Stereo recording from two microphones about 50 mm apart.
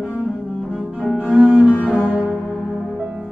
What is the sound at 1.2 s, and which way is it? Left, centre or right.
Cello, right.